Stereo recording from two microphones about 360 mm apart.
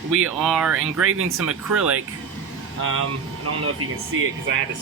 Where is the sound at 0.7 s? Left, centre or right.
Right.